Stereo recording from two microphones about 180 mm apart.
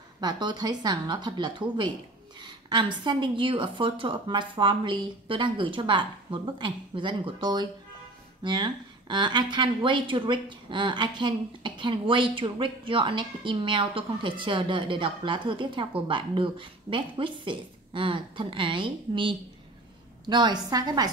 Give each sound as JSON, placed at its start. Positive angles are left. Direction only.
{"t": 0.2, "sound": "speech", "side_deg": -25}